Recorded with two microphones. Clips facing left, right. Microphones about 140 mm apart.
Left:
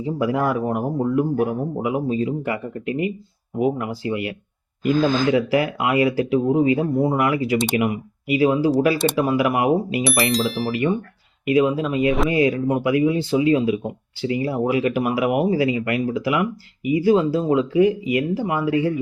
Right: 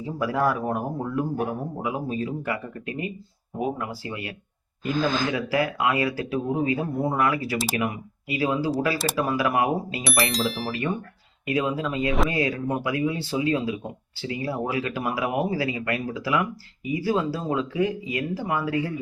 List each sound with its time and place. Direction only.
0.0 s speech: 20° left (ahead or behind)
10.0 s speech: centre (ahead or behind)
11.4 s speech: 20° left (ahead or behind)